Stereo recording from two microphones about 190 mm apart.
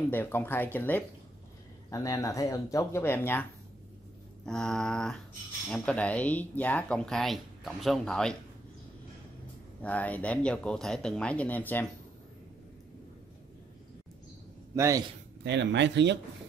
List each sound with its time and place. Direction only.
0.1 s speech: 10° left (ahead or behind)
4.5 s speech: 5° left (ahead or behind)
9.8 s speech: 10° left (ahead or behind)
14.8 s a man's voice: 15° right (ahead or behind)
15.4 s speech: 65° right (ahead or behind)